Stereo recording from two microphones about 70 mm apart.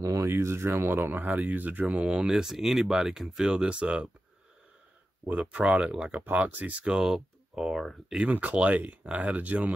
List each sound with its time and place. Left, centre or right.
0.0 s speech: right
1.9 s speech: centre
5.5 s speech: centre
6.2 s speech: right
7.0 s speech: centre
8.3 s speech: right